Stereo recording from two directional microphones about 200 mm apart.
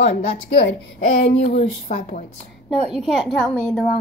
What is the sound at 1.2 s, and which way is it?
Speech, 30° left (ahead or behind).